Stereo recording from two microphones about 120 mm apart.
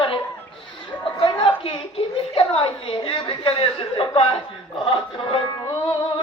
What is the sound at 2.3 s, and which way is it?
Chuckle, 55° left (ahead or behind).